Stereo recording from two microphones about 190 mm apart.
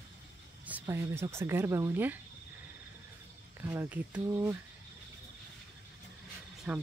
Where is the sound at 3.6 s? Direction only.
10° right (ahead or behind).